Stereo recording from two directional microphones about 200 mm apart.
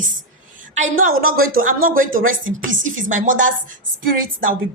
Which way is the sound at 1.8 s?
45° right (ahead or behind).